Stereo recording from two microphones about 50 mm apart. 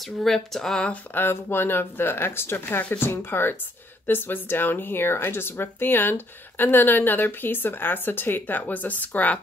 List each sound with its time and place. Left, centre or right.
0.2 s speech: centre
1.1 s speech: left